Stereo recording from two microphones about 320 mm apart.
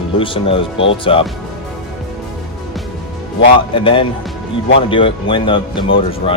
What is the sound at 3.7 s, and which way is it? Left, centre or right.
Speech, centre.